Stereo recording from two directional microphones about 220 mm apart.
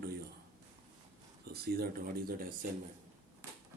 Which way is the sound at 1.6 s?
45° right (ahead or behind).